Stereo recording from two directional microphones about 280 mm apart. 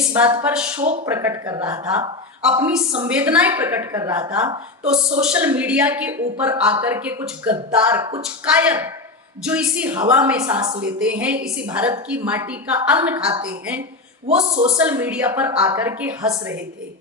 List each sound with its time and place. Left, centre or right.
0.1 s a woman's voice: centre
14.3 s speech: right
14.8 s a woman's voice: centre